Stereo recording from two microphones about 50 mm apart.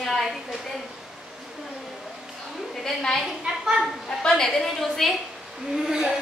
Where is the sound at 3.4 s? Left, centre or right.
Centre.